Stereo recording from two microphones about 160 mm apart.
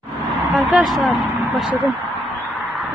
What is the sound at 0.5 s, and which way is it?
Speech, centre (ahead or behind).